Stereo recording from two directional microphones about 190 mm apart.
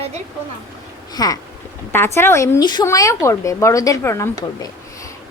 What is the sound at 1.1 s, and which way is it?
A woman's voice, 20° left (ahead or behind).